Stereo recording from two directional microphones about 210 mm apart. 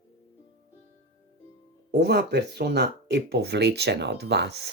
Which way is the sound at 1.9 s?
50° right (ahead or behind).